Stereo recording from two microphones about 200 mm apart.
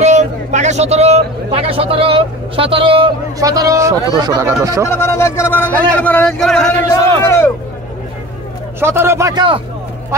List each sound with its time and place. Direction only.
0.0 s speech: 35° right (ahead or behind); by 4.8 s 15° right (ahead or behind)
4.8 s a man's voice: 15° left (ahead or behind)
7.2 s a sound: 10° left (ahead or behind)
8.7 s speech: 10° right (ahead or behind)